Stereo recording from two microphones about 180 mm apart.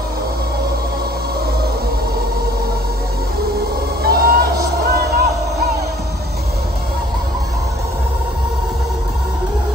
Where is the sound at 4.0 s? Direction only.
60° right (ahead or behind).